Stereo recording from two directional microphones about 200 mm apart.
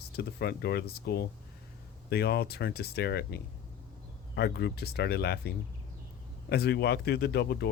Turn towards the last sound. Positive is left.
turn(degrees=55)  # may be behind; listen again after turning